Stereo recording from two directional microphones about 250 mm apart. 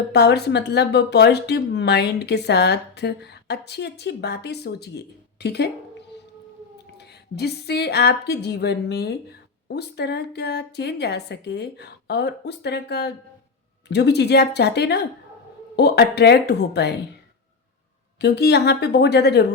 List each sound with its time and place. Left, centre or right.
0.1 s speech: left
6.9 s speech: left
18.2 s speech: left